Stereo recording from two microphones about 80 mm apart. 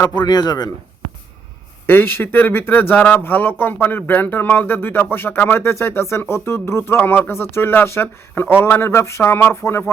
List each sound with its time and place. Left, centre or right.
0.1 s speech: left
1.9 s speech: left